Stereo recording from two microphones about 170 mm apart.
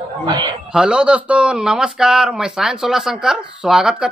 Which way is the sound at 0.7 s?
5° right (ahead or behind).